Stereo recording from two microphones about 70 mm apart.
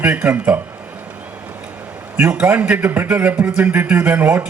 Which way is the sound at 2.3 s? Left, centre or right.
Right.